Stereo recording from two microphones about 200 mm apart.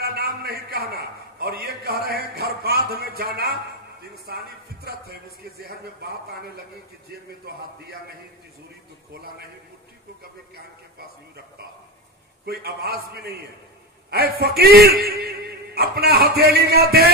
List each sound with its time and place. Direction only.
0.0 s a man's voice: 50° right (ahead or behind)
12.4 s a man's voice: 50° right (ahead or behind)